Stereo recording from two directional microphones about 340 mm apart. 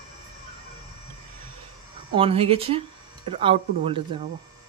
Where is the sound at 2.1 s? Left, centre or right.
Centre.